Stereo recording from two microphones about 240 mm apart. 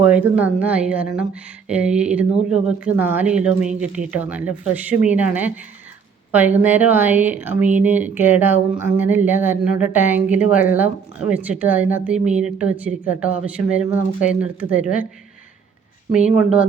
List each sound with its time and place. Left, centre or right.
0.0 s a woman's voice: centre
16.1 s a woman's voice: centre